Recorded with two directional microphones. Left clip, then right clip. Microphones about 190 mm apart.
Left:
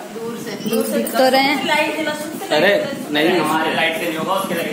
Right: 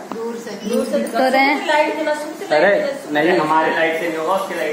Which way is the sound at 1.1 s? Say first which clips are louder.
Left 1 dB; 65° left (ahead or behind).